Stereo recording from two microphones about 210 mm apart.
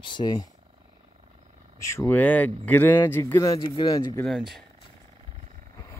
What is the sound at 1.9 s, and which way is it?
Speech, 10° left (ahead or behind).